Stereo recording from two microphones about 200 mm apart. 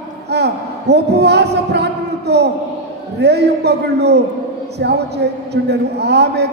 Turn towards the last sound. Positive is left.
turn(degrees=-55)  # may be behind; listen again after turning